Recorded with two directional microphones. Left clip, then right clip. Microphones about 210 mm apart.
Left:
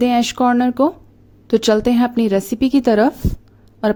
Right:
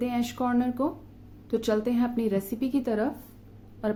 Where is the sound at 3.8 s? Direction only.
45° left (ahead or behind).